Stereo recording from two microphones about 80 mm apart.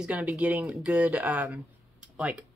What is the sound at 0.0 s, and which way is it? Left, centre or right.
Speech, centre.